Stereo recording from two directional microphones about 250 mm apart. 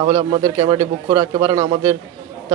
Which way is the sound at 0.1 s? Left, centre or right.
Centre.